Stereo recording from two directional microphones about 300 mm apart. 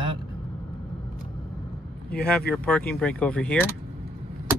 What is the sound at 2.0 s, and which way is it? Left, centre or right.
Speech, centre.